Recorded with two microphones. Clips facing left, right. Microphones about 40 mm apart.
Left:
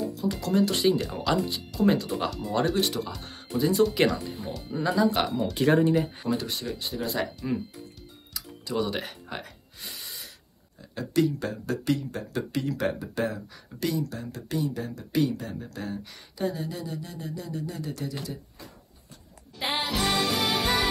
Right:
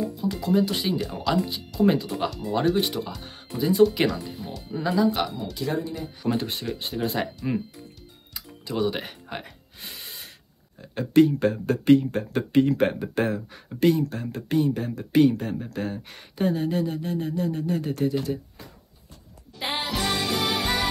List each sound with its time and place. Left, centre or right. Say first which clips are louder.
0.2 s speech: right 2 dB; centre
5.4 s speech: left 6 dB; left
6.2 s speech: right 3 dB; right
7.4 s speech: right 4 dB; centre
8.3 s music: even; right
8.7 s speech: right 2 dB; centre
9.8 s a sound: right 1 dB; right
10.8 s speech: right 7 dB; right
19.6 s music: even; centre